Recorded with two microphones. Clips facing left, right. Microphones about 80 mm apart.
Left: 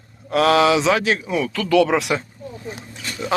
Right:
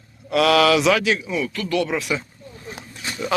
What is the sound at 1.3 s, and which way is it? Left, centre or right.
Speech, left.